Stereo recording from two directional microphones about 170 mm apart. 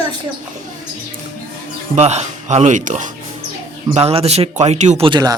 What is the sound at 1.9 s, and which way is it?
Speech, 40° right (ahead or behind).